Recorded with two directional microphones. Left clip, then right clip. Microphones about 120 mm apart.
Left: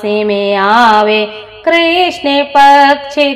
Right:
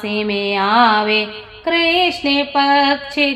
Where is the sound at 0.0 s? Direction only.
40° left (ahead or behind).